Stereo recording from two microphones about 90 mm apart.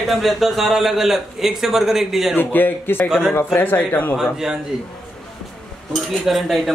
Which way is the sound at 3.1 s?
5° right (ahead or behind).